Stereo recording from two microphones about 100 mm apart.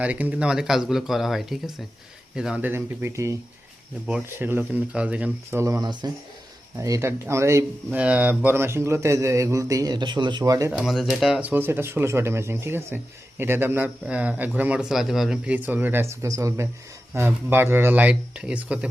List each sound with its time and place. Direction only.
0.0 s speech: 15° right (ahead or behind); by 3.3 s 30° right (ahead or behind)
4.4 s a man's voice: 20° right (ahead or behind)
5.5 s speech: 30° right (ahead or behind)
5.8 s speech: 45° right (ahead or behind)
6.7 s speech: 35° right (ahead or behind)
7.9 s speech: 15° right (ahead or behind); by 10.5 s 50° right (ahead or behind)
10.7 s speech: 5° right (ahead or behind)
11.4 s a man's voice: 20° right (ahead or behind); by 15.5 s 5° right (ahead or behind)
15.5 s a man's voice: 15° right (ahead or behind)